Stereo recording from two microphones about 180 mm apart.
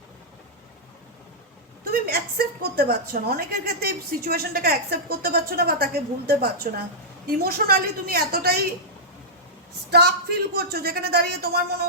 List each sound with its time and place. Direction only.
1.9 s a woman's voice: 60° right (ahead or behind)
9.9 s a woman's voice: 60° right (ahead or behind)